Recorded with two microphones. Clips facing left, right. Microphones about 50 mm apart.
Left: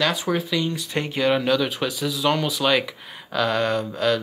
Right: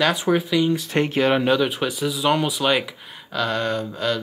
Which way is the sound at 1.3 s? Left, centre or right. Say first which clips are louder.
Right 2 dB; centre.